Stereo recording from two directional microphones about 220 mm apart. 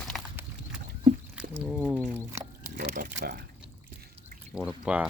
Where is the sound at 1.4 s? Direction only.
5° right (ahead or behind).